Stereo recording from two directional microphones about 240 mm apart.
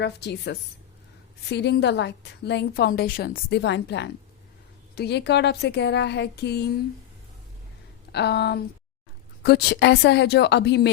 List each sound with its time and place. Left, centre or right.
0.0 s a woman's voice: left
8.1 s a woman's voice: left